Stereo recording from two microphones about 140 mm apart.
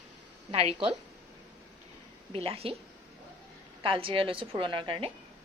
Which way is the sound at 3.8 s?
40° right (ahead or behind).